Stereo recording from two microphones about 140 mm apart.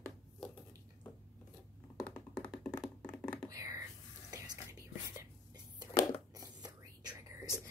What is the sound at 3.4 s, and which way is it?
Whispering, 25° right (ahead or behind).